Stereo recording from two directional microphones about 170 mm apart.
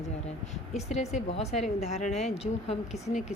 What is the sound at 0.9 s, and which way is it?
Speech, 40° left (ahead or behind).